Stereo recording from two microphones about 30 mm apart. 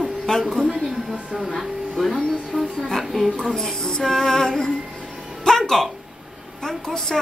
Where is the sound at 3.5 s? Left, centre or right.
Left.